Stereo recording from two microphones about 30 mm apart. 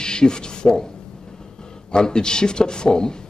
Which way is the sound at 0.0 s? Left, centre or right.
Left.